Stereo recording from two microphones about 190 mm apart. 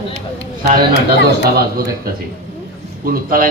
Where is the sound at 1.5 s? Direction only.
55° right (ahead or behind).